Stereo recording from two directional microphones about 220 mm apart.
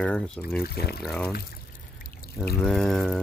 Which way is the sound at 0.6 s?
45° left (ahead or behind).